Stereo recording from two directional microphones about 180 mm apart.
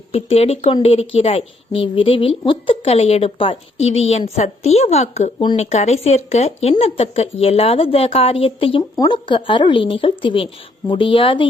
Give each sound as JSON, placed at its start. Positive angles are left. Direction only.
{"t": 0.1, "sound": "speech", "side_deg": 35}